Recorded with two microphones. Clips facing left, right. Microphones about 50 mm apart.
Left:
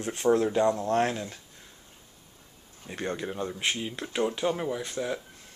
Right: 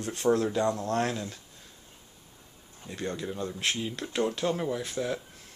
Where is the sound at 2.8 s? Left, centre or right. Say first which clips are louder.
Left 1 dB; left.